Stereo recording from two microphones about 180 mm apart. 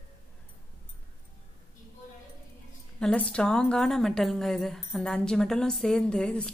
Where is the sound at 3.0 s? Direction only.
5° left (ahead or behind).